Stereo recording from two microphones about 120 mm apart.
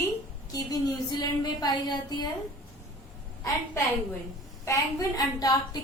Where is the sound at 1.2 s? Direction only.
35° left (ahead or behind).